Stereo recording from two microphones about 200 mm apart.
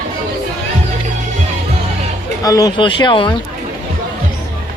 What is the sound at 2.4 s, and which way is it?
Speech, 20° left (ahead or behind).